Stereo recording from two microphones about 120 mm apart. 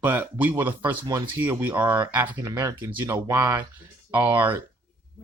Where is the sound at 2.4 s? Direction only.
25° right (ahead or behind).